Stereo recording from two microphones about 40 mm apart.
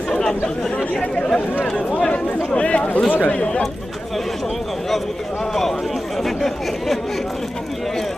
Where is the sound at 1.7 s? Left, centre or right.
Centre.